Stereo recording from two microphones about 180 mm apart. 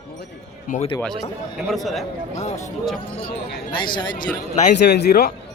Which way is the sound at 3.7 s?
25° left (ahead or behind).